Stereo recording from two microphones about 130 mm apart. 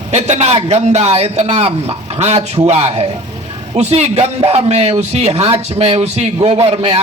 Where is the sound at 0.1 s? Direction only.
60° right (ahead or behind).